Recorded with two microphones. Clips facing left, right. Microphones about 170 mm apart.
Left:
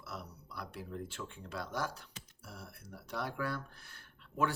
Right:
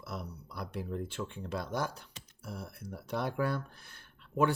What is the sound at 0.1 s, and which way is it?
Speech, 20° right (ahead or behind).